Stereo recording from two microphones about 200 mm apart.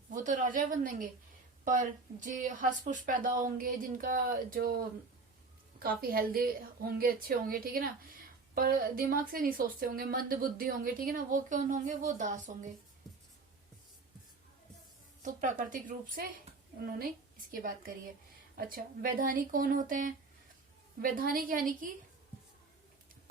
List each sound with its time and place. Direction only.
0.1 s a woman's voice: 40° right (ahead or behind)
5.8 s a woman's voice: 45° right (ahead or behind)
15.2 s a woman's voice: 40° right (ahead or behind)
17.5 s a woman's voice: 45° right (ahead or behind)